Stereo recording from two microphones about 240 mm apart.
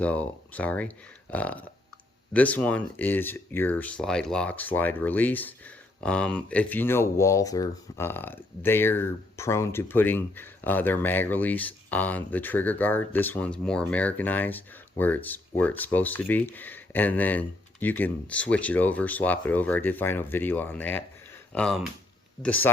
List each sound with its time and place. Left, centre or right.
0.0 s speech: centre